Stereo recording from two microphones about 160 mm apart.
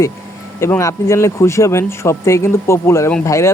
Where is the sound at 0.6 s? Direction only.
20° left (ahead or behind).